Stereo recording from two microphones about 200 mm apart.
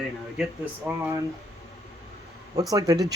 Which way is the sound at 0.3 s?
10° right (ahead or behind).